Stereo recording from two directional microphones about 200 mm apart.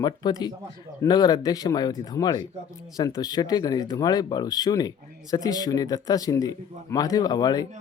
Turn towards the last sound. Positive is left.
turn(degrees=20)  # may be behind; listen again after turning